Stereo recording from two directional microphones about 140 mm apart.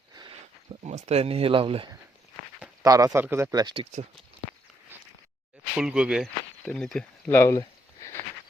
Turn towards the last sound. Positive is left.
turn(degrees=15)  # may be behind; listen again after turning